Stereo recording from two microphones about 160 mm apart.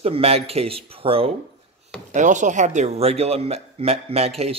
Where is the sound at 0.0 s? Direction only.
40° right (ahead or behind).